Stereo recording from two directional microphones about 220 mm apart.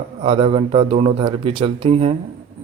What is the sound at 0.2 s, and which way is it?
Speech, 25° right (ahead or behind).